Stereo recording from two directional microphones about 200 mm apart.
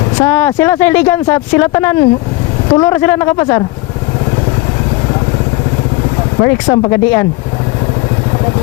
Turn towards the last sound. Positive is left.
turn(degrees=15)  # may be behind; listen again after turning